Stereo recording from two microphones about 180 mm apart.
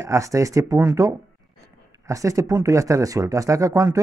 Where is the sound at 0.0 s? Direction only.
15° right (ahead or behind).